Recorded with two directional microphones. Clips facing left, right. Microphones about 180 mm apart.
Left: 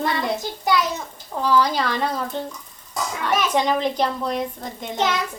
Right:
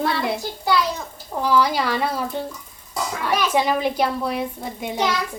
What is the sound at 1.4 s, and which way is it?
A child's voice, 10° right (ahead or behind).